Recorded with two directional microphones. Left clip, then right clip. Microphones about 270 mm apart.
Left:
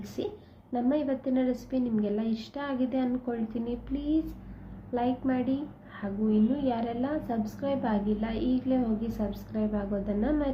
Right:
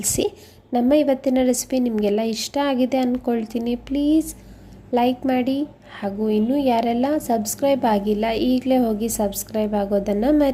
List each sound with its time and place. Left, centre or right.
0.2 s a woman's voice: right